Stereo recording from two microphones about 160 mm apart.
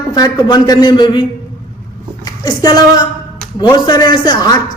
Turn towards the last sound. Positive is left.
turn(degrees=25)  # may be behind; listen again after turning